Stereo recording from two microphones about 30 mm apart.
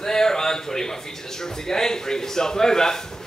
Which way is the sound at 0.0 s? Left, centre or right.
Centre.